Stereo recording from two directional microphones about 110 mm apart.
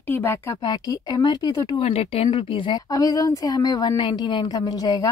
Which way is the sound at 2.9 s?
35° left (ahead or behind).